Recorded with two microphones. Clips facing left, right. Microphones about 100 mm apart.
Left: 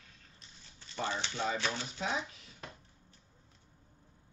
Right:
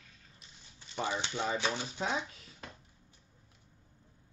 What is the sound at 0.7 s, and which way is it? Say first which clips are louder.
Speech: right 1 dB; 15° right (ahead or behind).